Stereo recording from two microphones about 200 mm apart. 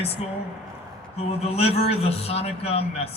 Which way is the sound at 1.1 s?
30° left (ahead or behind).